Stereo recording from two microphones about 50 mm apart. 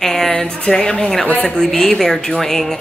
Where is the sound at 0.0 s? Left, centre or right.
Centre.